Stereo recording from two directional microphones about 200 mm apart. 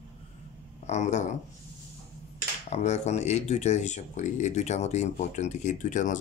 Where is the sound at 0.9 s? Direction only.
35° left (ahead or behind).